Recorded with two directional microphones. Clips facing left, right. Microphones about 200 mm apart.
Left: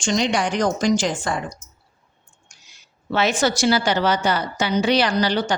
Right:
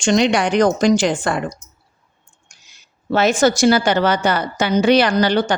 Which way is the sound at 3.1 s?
45° right (ahead or behind).